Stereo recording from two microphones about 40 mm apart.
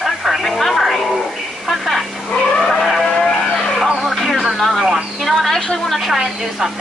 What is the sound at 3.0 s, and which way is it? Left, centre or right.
Vehicle, centre.